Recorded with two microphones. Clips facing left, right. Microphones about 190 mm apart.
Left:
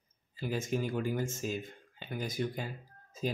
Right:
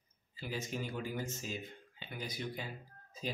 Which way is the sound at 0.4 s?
50° left (ahead or behind).